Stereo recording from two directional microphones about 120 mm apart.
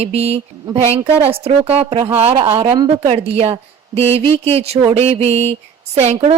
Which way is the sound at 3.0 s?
60° right (ahead or behind).